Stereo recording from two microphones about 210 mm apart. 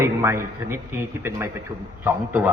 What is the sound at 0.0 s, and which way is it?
A man's voice, 10° right (ahead or behind).